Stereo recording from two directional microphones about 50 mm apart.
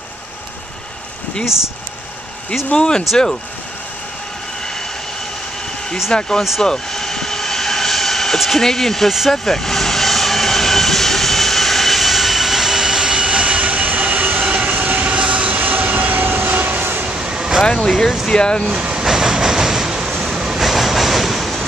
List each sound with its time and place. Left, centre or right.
1.4 s speech: centre
2.7 s speech: centre
6.1 s speech: centre
6.6 s vehicle: centre; by 16.4 s right
16.4 s vehicle: right
17.0 s a sound: centre
17.8 s speech: centre
18.3 s speech: centre
18.8 s vehicle: centre
19.0 s train: centre
20.1 s vehicle: centre
20.3 s train: centre